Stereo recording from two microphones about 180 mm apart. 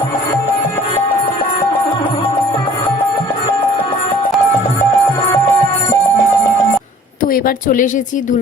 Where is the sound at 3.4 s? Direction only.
30° left (ahead or behind).